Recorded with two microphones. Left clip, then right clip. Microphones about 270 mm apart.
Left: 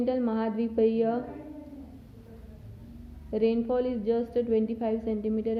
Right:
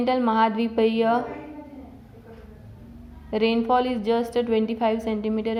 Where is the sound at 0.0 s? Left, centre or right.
Centre.